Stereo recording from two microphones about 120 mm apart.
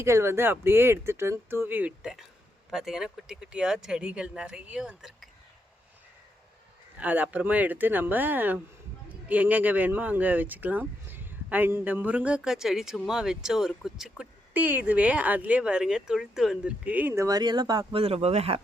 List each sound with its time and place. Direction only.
0.0 s speech: 20° right (ahead or behind); by 5.3 s 5° right (ahead or behind)
7.0 s speech: 15° right (ahead or behind)
17.2 s speech: 35° right (ahead or behind)
17.9 s speech: 55° right (ahead or behind)